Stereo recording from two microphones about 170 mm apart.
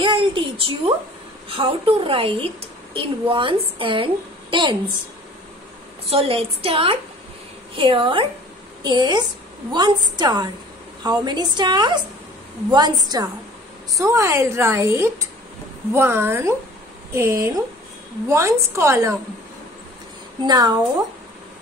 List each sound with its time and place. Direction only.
0.0 s a woman's voice: 30° right (ahead or behind)
6.0 s a woman's voice: 35° right (ahead or behind); by 19.1 s 15° right (ahead or behind)
20.4 s a woman's voice: 25° right (ahead or behind)